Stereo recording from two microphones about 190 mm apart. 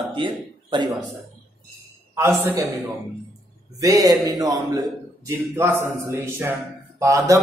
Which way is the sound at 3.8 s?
20° right (ahead or behind).